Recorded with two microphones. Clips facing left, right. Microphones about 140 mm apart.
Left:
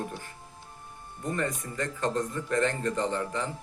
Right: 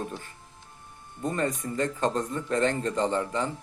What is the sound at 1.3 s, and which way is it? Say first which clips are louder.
Speech: right 3 dB; 25° right (ahead or behind).